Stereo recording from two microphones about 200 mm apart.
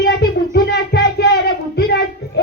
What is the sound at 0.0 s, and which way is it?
Music, 55° left (ahead or behind).